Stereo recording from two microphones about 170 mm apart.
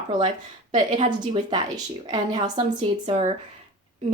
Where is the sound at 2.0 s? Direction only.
25° right (ahead or behind).